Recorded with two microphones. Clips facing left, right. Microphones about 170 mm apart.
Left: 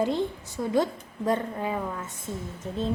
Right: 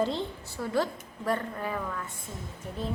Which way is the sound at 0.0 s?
15° left (ahead or behind).